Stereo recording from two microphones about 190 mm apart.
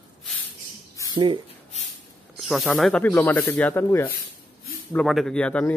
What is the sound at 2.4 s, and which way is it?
Speech, centre (ahead or behind).